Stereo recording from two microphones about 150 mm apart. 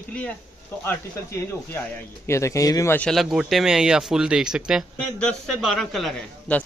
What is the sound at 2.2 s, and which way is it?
Speech, 20° left (ahead or behind).